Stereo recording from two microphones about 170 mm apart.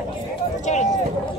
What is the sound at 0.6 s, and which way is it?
Run, 45° left (ahead or behind).